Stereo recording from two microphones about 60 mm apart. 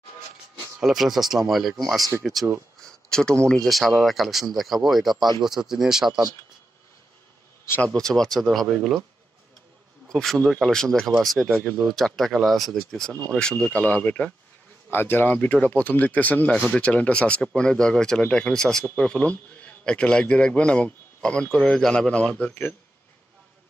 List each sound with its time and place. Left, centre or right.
0.7 s speech: centre
2.8 s a sound: centre
3.4 s speech: centre
7.8 s speech: centre
10.0 s a man's voice: centre; by 14.3 s left
14.9 s a man's voice: left